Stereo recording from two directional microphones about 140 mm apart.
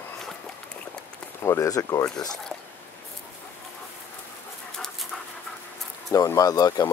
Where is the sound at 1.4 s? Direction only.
20° left (ahead or behind).